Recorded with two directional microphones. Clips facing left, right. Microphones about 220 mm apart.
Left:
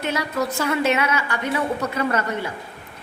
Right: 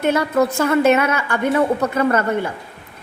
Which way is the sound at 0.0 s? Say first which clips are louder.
Right 7 dB; 55° right (ahead or behind).